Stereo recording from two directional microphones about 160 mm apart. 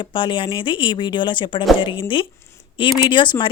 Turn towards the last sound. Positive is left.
turn(degrees=30)  # may be behind; listen again after turning